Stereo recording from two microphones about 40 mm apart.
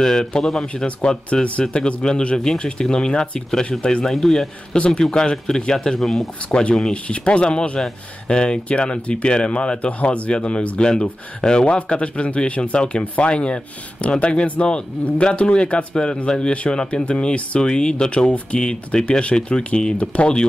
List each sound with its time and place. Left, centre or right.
0.0 s speech: centre
0.8 s speech: left; by 4.5 s centre
4.7 s speech: left
5.9 s speech: centre
6.9 s speech: left